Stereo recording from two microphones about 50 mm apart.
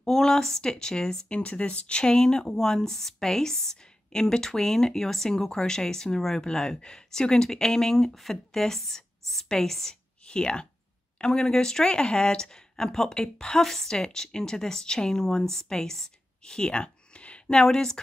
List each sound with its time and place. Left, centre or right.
0.0 s speech: centre
10.2 s speech: centre
17.6 s speech: centre